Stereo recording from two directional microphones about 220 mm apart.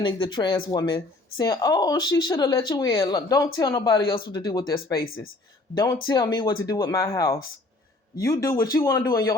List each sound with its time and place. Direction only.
0.0 s speech: 20° left (ahead or behind)
5.0 s speech: 65° left (ahead or behind)
5.7 s speech: 15° left (ahead or behind)